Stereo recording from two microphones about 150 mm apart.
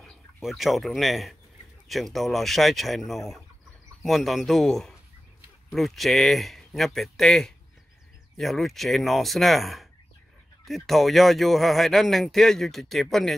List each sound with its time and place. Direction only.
0.0 s speech: centre (ahead or behind)